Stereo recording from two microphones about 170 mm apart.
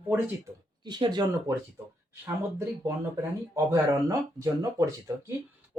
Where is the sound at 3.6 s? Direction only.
15° right (ahead or behind).